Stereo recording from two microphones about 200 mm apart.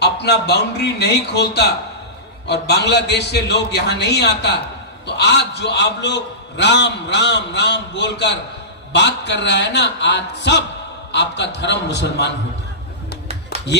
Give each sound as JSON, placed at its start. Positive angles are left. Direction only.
{"t": 0.0, "sound": "a man's voice", "side_deg": 55}